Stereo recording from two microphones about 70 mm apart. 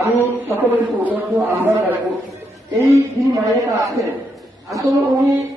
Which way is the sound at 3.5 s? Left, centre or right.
Right.